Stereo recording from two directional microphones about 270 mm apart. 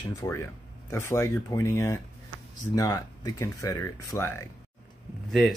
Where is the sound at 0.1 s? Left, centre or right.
Centre.